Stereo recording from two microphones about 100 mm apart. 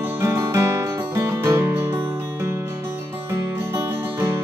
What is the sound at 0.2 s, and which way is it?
Music, 25° right (ahead or behind).